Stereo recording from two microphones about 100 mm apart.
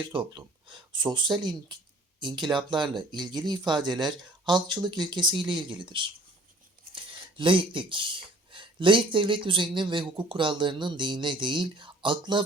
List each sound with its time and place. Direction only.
0.1 s speech: 55° right (ahead or behind)